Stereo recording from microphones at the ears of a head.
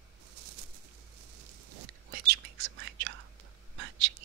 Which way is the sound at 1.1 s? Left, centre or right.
Right.